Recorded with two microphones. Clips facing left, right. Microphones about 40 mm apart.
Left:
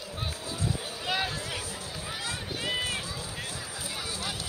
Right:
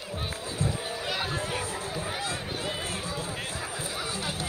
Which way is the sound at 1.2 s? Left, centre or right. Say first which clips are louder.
Right 3 dB; right.